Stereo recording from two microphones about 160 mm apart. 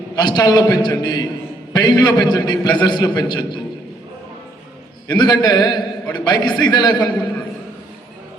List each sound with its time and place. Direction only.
0.2 s a man's voice: 25° left (ahead or behind)
5.0 s a man's voice: 25° left (ahead or behind)